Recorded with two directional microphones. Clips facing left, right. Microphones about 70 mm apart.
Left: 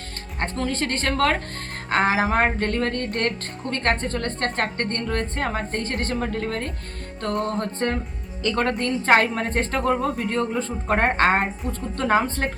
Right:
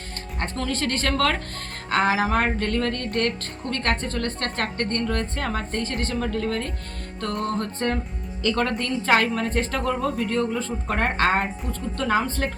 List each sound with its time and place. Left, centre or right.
0.3 s music: left
3.2 s a woman's voice: left
5.0 s music: left
5.8 s a woman's voice: left
6.1 s a woman's voice: left
7.4 s music: left
8.4 s a woman's voice: left